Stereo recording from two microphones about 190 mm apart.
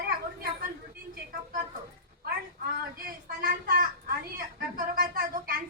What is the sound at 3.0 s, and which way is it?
Speech, 50° right (ahead or behind).